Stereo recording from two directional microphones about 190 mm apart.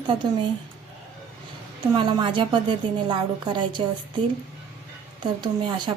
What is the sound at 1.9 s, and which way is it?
A woman's voice, 25° right (ahead or behind).